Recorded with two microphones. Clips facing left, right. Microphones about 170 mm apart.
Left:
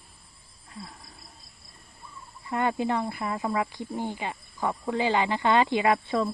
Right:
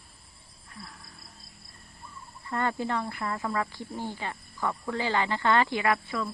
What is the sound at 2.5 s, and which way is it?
Speech, 15° left (ahead or behind).